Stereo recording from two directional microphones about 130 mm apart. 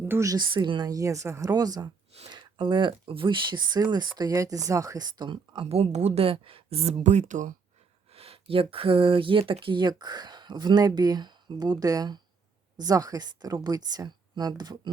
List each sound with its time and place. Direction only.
0.0 s a woman's voice: 20° right (ahead or behind); by 7.5 s 75° right (ahead or behind)
8.1 s a woman's voice: 50° right (ahead or behind); by 14.8 s 30° right (ahead or behind)